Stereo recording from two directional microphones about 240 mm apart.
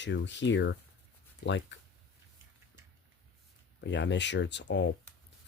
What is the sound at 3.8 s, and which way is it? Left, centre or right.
Speech, left.